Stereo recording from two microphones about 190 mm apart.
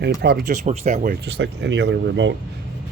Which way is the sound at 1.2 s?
65° right (ahead or behind).